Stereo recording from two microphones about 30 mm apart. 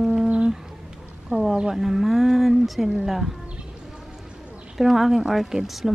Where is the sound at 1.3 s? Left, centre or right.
Right.